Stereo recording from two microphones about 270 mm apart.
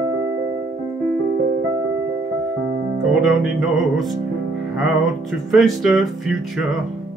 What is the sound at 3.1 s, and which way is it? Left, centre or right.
Music, centre.